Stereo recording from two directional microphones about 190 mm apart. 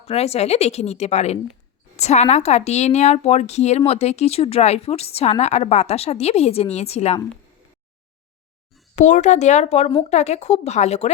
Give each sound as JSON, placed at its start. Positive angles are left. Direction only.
{"t": 0.1, "sound": "a woman's voice", "side_deg": 35}
{"t": 9.0, "sound": "a woman's voice", "side_deg": 40}